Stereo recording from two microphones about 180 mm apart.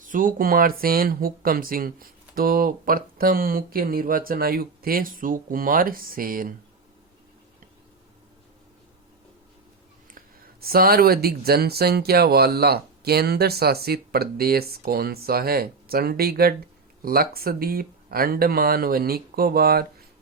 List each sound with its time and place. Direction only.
0.0 s speech: 50° right (ahead or behind)
10.6 s speech: 55° right (ahead or behind)